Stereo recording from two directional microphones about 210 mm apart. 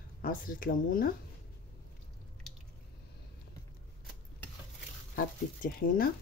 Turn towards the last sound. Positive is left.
turn(degrees=45)  # may be behind; listen again after turning